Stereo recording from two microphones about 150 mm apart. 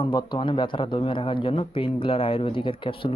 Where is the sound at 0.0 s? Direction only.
30° left (ahead or behind).